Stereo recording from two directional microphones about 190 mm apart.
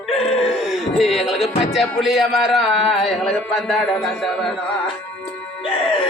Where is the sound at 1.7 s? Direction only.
Centre (ahead or behind).